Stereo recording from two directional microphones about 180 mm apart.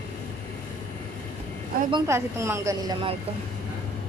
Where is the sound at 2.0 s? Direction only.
15° right (ahead or behind).